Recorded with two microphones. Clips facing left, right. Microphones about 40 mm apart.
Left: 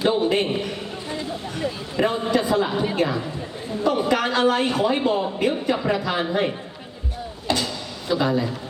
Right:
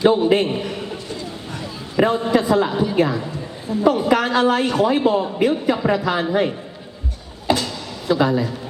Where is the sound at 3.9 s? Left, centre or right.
Centre.